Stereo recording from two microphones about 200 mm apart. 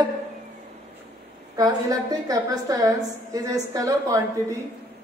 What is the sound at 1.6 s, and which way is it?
A woman's voice, 20° right (ahead or behind).